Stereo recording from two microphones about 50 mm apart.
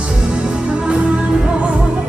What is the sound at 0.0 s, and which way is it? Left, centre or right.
Music, right.